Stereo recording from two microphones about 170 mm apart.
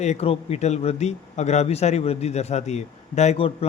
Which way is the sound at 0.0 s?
40° left (ahead or behind).